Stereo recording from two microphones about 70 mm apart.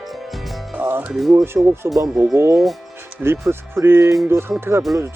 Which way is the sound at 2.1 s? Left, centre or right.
Right.